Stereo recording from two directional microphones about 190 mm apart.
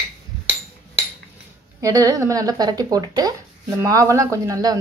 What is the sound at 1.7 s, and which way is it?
Speech, 15° right (ahead or behind).